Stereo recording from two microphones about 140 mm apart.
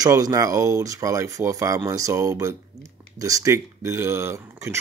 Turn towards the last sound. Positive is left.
turn(degrees=-20)  # may be behind; listen again after turning